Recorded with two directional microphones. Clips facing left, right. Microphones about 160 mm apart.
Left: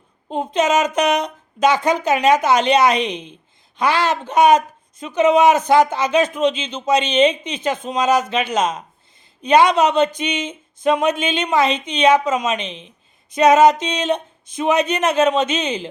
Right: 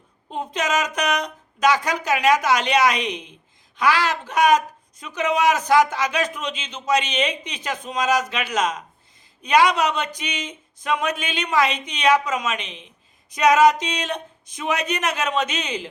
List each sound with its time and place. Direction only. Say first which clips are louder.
0.3 s speech: left 7 dB; 25° left (ahead or behind)